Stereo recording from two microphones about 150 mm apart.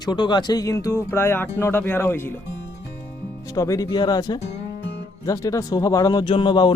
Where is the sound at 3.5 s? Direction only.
20° left (ahead or behind).